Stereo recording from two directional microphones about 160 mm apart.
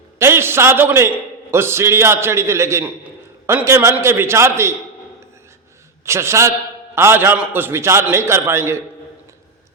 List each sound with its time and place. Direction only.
0.2 s a man's voice: 15° right (ahead or behind)
6.1 s a man's voice: 15° right (ahead or behind)